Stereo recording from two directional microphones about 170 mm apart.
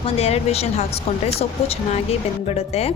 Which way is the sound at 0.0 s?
35° left (ahead or behind).